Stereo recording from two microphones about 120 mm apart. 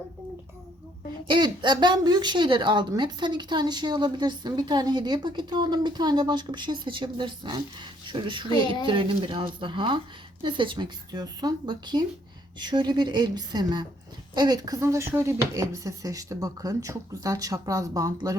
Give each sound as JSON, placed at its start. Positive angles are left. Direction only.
{"t": 1.3, "sound": "a woman's voice", "side_deg": -40}